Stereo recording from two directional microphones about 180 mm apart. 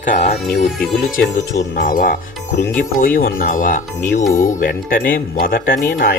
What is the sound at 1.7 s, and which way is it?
Speech, 55° left (ahead or behind).